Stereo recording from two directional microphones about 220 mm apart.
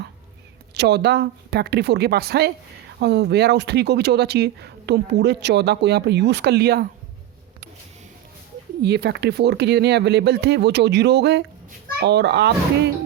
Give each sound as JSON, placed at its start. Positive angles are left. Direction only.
{"t": 0.7, "sound": "speech", "side_deg": -50}
{"t": 8.8, "sound": "speech", "side_deg": -50}